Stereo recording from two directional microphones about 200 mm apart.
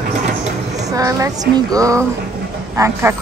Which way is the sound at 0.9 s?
15° right (ahead or behind).